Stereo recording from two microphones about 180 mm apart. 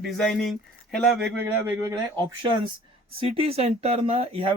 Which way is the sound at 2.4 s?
30° right (ahead or behind).